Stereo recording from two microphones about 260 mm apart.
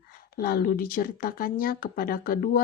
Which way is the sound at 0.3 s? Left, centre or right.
Left.